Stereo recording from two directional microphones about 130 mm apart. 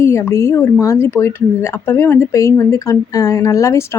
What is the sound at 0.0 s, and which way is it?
A woman's voice, 20° left (ahead or behind).